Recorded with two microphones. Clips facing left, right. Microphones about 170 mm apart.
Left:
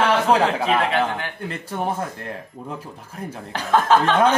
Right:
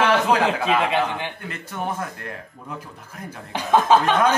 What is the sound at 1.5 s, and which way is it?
Speech, 30° left (ahead or behind).